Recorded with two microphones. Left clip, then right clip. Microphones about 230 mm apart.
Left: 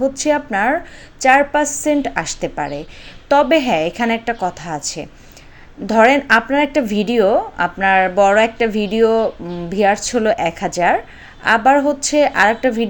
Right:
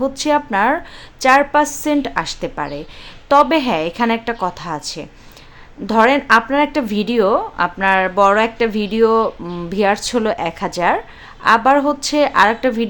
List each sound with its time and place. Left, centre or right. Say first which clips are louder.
0.0 s a woman's voice: even; centre